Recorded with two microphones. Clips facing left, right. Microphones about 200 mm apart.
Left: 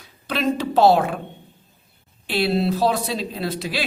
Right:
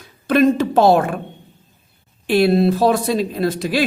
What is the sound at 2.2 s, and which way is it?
A woman's voice, 50° right (ahead or behind).